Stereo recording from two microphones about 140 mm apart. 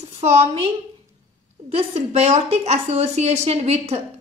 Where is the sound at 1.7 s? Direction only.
50° right (ahead or behind).